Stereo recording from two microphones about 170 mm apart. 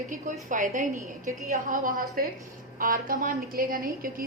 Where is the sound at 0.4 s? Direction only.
50° right (ahead or behind).